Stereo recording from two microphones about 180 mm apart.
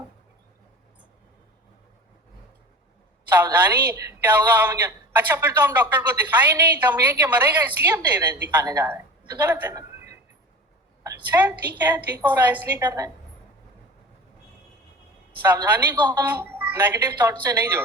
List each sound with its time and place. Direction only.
3.3 s a woman's voice: 10° right (ahead or behind)
9.5 s a sound: 15° right (ahead or behind)
11.0 s a woman's voice: 15° right (ahead or behind)
15.4 s a woman's voice: 20° right (ahead or behind)
16.3 s a woman's voice: 10° right (ahead or behind)